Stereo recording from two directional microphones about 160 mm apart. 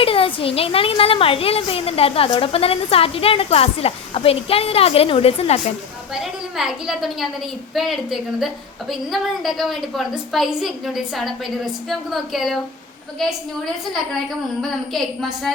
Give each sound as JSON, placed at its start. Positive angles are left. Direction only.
{"t": 0.0, "sound": "a woman's voice", "side_deg": 35}
{"t": 6.1, "sound": "a woman's voice", "side_deg": -5}
{"t": 14.6, "sound": "a woman's voice", "side_deg": 0}